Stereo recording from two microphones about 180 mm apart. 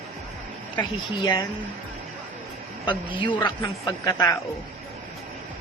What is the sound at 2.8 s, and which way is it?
A man's voice, 25° left (ahead or behind).